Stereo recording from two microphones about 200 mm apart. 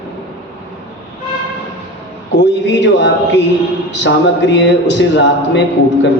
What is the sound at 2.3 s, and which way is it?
Speech, 60° left (ahead or behind).